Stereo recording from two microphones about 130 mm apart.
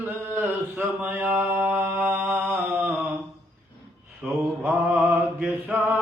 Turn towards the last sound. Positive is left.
turn(degrees=-10)  # may be behind; listen again after turning